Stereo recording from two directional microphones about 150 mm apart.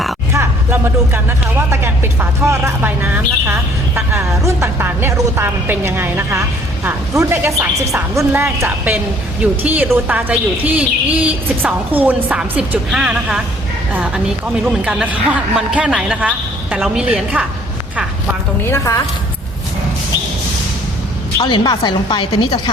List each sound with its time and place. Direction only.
0.3 s a woman's voice: 15° right (ahead or behind)
18.7 s a woman's voice: 15° left (ahead or behind)
21.3 s a woman's voice: 30° left (ahead or behind)